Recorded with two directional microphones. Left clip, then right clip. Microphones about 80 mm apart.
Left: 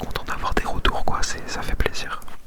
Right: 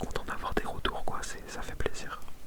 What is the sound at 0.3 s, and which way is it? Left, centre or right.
Whispering, centre.